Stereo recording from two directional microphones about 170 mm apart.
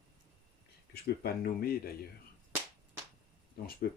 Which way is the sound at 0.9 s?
65° left (ahead or behind).